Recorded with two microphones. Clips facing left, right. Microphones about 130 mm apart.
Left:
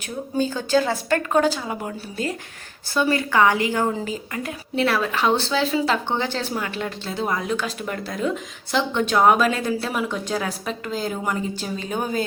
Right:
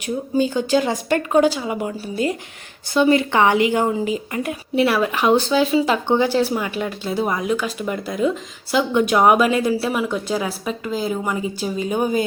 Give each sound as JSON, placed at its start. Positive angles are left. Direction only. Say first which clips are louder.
{"t": 0.5, "sound": "speech", "louder": "right 2 dB", "side_deg": -15}
{"t": 2.9, "sound": "a woman's voice", "louder": "right 5 dB", "side_deg": -20}